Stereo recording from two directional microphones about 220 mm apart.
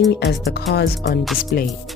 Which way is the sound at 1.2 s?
Centre (ahead or behind).